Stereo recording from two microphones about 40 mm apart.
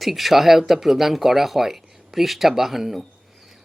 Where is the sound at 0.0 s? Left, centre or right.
Centre.